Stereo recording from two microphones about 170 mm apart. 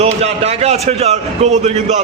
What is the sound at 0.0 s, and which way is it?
A man's voice, 40° right (ahead or behind).